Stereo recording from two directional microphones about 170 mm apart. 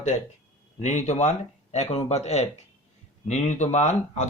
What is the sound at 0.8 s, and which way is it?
Speech, 45° left (ahead or behind).